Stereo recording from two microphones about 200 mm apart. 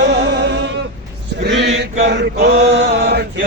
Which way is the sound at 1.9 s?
55° right (ahead or behind).